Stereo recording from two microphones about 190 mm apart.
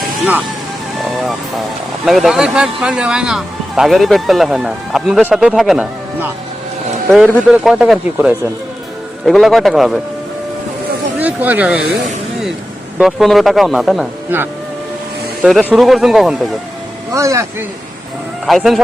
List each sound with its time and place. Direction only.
1.0 s music: centre (ahead or behind)
2.0 s speech: centre (ahead or behind)
11.2 s speech: 10° right (ahead or behind)
13.0 s speech: centre (ahead or behind)
15.4 s speech: centre (ahead or behind)
17.1 s speech: 15° right (ahead or behind)
18.4 s speech: centre (ahead or behind)